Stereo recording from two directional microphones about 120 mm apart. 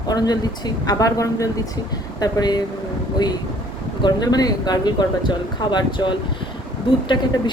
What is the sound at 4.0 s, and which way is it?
Speech, 35° left (ahead or behind).